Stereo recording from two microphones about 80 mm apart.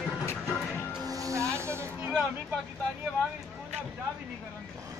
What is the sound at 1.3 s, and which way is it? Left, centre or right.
Snake, right.